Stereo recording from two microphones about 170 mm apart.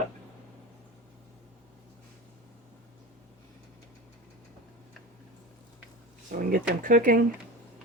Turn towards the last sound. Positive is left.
turn(degrees=-55)  # may be behind; listen again after turning